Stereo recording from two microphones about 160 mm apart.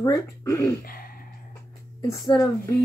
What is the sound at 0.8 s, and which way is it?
Speech, 65° left (ahead or behind).